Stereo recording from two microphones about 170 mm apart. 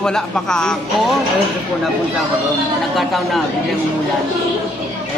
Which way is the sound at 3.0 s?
Centre (ahead or behind).